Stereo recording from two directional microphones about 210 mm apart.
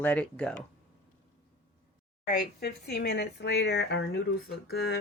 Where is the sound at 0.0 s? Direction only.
5° left (ahead or behind).